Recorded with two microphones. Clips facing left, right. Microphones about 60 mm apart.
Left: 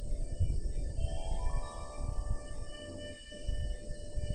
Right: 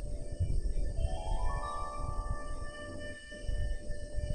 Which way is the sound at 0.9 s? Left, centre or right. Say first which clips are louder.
Right 4 dB; right.